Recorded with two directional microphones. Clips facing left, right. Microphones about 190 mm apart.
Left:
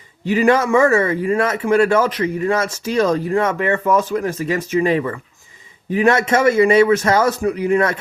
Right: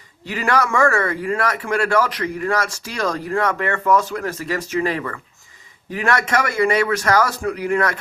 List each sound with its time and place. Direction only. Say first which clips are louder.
0.3 s speech: left 6 dB; 20° left (ahead or behind)